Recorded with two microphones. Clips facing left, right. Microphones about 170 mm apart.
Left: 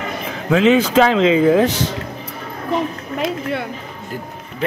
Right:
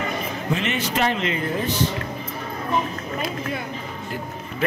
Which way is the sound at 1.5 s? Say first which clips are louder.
Left 9 dB; 90° left.